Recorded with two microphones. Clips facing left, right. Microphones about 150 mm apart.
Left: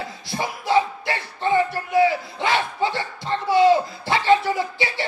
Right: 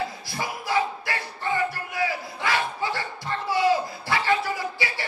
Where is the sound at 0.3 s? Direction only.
25° left (ahead or behind).